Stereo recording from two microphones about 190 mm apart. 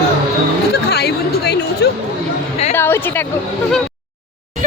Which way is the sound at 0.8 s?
60° left (ahead or behind).